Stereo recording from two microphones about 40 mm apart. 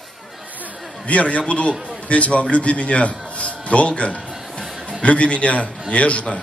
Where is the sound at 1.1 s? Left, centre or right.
Left.